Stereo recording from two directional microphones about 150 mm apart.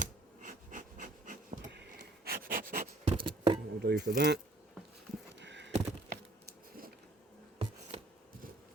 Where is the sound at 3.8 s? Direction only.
90° right.